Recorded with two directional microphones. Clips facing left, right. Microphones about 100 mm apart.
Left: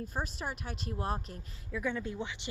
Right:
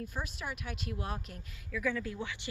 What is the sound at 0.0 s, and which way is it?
Speech, 35° left (ahead or behind).